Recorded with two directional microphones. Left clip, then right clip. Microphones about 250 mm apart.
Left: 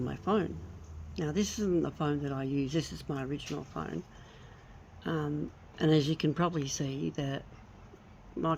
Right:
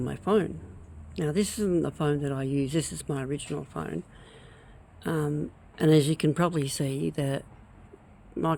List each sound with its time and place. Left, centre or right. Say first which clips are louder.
0.0 s a man's voice: right 5 dB; right
5.0 s speech: right 5 dB; right